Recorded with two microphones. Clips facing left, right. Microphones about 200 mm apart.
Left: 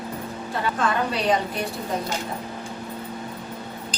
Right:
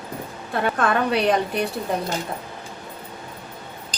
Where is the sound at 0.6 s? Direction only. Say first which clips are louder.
Right 3 dB; 60° right (ahead or behind).